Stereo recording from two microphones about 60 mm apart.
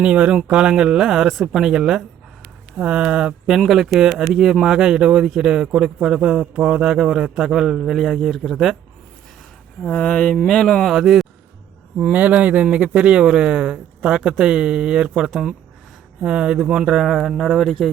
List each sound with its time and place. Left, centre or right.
0.0 s speech: centre
3.7 s a man's voice: centre
9.8 s speech: left
10.8 s a man's voice: centre
12.1 s speech: right; by 17.9 s centre